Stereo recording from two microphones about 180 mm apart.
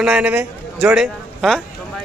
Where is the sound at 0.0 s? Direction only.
5° right (ahead or behind).